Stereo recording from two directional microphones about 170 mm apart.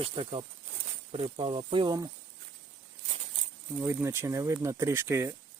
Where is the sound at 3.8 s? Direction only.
15° right (ahead or behind).